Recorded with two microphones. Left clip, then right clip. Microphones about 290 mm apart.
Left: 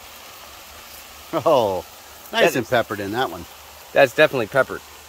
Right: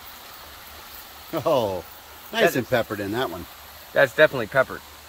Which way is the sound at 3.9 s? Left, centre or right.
Left.